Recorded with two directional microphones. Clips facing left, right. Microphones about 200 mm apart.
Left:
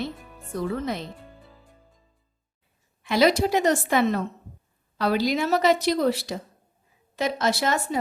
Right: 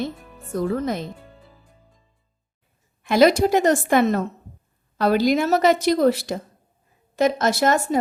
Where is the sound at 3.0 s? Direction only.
50° right (ahead or behind).